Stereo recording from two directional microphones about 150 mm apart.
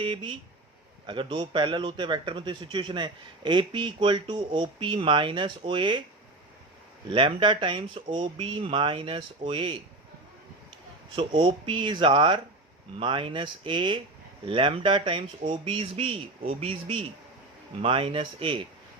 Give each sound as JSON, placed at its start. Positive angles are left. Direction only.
{"t": 0.0, "sound": "a man's voice", "side_deg": -35}
{"t": 7.1, "sound": "a man's voice", "side_deg": -35}
{"t": 11.1, "sound": "a man's voice", "side_deg": -30}